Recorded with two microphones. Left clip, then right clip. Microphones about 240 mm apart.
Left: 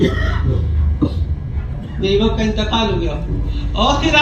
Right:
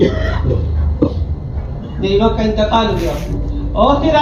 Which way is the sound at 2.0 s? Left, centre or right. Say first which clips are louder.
Right 3 dB; left.